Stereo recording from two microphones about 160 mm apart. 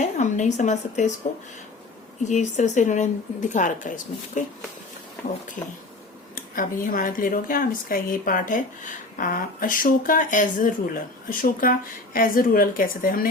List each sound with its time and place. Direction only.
0.0 s a woman's voice: 50° left (ahead or behind)
2.2 s a woman's voice: 50° left (ahead or behind)
6.3 s speech: 60° left (ahead or behind)